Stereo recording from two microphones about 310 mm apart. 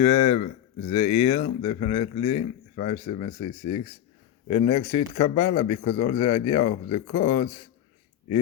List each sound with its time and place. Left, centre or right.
0.0 s speech: left